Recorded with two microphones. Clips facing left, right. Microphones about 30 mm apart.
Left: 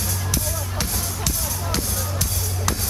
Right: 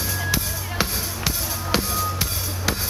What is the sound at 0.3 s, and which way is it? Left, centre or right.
Music, right.